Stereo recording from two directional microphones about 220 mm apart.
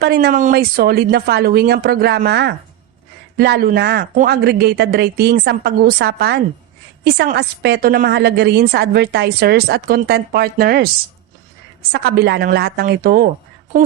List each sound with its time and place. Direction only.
0.0 s a woman's voice: 45° right (ahead or behind)
11.9 s a woman's voice: 45° right (ahead or behind)